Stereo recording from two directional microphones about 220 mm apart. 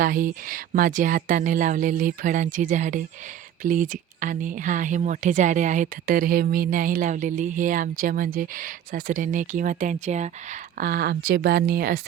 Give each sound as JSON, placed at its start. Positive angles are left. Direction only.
{"t": 0.0, "sound": "speech", "side_deg": -40}
{"t": 10.8, "sound": "speech", "side_deg": -45}